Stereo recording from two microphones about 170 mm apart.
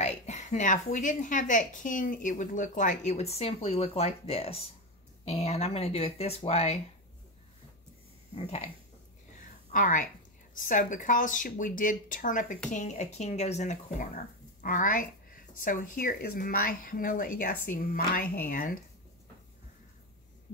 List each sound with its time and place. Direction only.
0.0 s a woman's voice: 45° left (ahead or behind)
8.4 s speech: 35° left (ahead or behind)
9.7 s a woman's voice: 50° left (ahead or behind)